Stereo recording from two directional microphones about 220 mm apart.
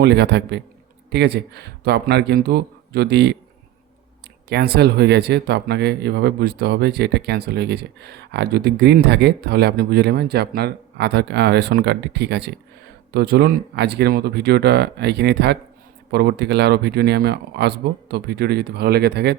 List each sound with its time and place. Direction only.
0.0 s speech: 50° right (ahead or behind)
4.4 s speech: 45° right (ahead or behind)